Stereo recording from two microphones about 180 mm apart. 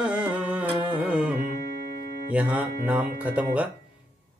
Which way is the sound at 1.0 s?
10° right (ahead or behind).